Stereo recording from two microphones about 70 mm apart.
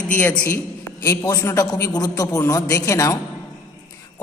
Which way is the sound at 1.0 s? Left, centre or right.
Left.